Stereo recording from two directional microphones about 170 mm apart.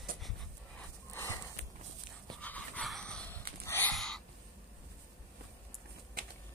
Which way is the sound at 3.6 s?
10° left (ahead or behind).